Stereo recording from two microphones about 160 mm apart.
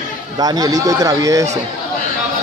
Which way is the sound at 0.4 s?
25° right (ahead or behind).